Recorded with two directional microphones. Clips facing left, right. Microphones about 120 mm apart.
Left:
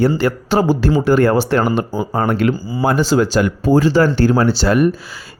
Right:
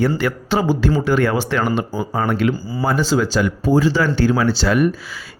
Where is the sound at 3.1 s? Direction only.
60° left (ahead or behind).